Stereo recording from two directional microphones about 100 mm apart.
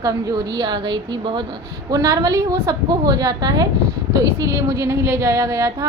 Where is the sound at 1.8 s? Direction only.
35° right (ahead or behind).